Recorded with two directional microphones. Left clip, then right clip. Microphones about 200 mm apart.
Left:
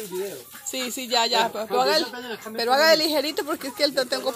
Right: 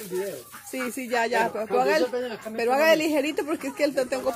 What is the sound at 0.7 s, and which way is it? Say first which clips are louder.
Speech: left 2 dB; 20° left (ahead or behind).